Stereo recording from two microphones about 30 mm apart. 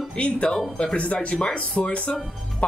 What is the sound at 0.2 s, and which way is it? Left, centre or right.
Speech, left.